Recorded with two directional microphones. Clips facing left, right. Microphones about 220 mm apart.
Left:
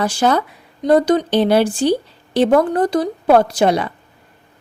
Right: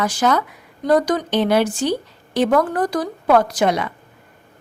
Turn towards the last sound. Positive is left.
turn(degrees=30)  # may be behind; listen again after turning